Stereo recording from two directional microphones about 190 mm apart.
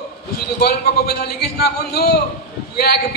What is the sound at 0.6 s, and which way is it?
Speech, 55° left (ahead or behind).